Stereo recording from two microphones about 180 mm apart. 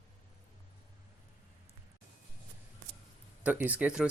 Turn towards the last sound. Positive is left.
turn(degrees=-5)  # may be behind; listen again after turning